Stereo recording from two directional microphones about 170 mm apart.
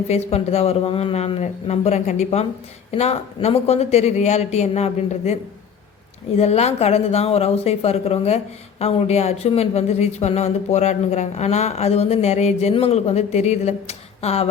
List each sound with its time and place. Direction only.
0.1 s speech: 35° left (ahead or behind)